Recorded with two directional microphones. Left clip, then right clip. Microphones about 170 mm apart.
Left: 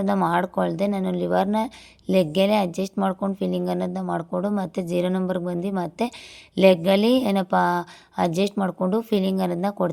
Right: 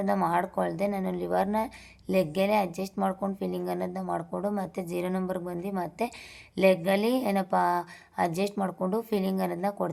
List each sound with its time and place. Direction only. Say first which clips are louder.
0.0 s speech: left 4 dB; 30° left (ahead or behind)